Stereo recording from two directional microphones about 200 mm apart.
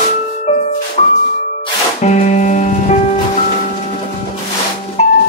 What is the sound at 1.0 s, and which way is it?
Music, 35° left (ahead or behind).